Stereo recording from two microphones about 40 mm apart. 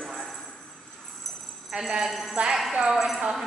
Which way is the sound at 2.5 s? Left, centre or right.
Centre.